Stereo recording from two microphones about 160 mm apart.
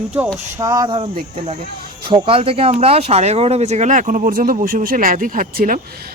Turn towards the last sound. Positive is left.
turn(degrees=-60)  # may be behind; listen again after turning